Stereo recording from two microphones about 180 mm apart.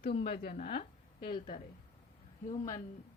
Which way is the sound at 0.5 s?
40° left (ahead or behind).